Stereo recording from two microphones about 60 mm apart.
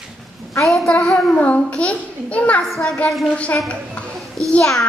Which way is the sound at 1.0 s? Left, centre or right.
Centre.